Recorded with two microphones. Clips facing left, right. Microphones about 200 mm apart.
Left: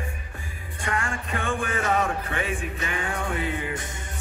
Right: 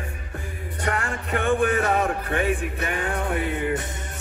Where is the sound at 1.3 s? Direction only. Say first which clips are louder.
Right 8 dB; 60° right (ahead or behind).